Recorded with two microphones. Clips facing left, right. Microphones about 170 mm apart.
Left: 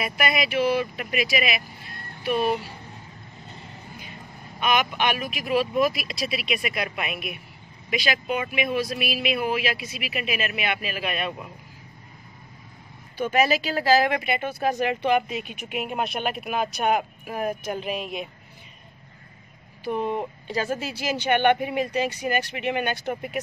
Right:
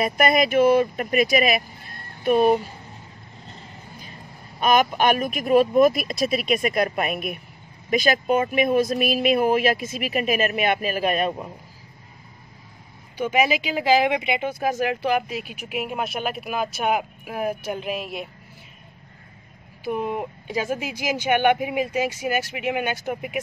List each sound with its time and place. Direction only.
0.0 s speech: 45° right (ahead or behind)
4.6 s speech: 40° right (ahead or behind)
13.2 s speech: 10° right (ahead or behind)
14.6 s speech: 5° right (ahead or behind)
19.8 s speech: 5° right (ahead or behind)